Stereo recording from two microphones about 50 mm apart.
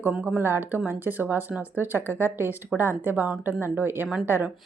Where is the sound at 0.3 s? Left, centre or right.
Right.